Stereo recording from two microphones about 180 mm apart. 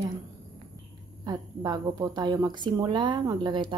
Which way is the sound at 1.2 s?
20° right (ahead or behind).